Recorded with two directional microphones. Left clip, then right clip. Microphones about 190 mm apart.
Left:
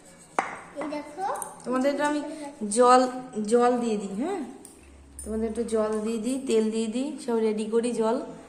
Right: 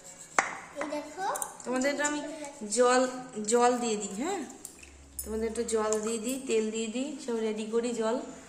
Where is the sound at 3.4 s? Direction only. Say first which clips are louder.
Left 3 dB; 10° left (ahead or behind).